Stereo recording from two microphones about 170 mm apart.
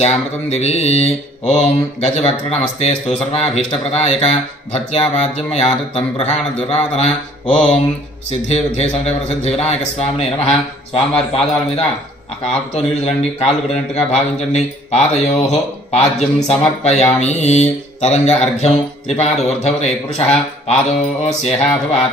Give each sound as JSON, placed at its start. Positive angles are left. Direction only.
{"t": 0.0, "sound": "mantra", "side_deg": 40}
{"t": 8.3, "sound": "mantra", "side_deg": 40}